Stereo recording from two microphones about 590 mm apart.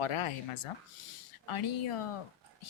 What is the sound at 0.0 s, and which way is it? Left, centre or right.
Speech, left.